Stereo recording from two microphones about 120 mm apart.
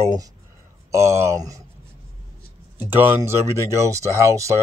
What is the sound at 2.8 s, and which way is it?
Speech, 15° right (ahead or behind).